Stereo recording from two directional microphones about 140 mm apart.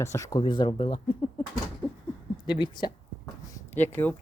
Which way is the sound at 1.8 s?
35° left (ahead or behind).